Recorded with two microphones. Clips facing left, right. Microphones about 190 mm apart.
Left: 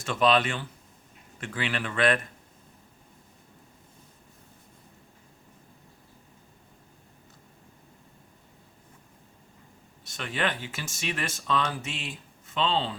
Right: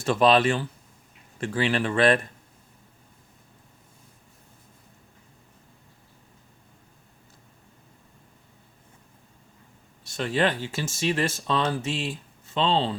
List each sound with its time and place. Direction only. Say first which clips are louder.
0.0 s speech: right 4 dB; 35° right (ahead or behind)
10.0 s speech: right 6 dB; 30° right (ahead or behind)